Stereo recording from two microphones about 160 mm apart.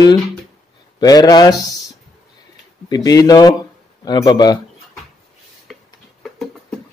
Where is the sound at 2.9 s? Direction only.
20° left (ahead or behind).